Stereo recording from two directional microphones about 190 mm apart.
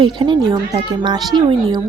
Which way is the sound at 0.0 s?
25° right (ahead or behind).